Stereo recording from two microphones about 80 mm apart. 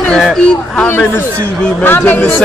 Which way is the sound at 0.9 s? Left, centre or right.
Left.